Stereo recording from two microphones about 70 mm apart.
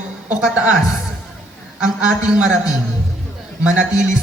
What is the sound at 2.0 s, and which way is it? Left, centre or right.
Speech, centre.